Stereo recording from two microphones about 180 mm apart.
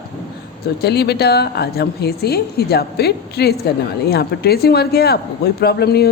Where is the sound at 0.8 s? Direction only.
65° left (ahead or behind).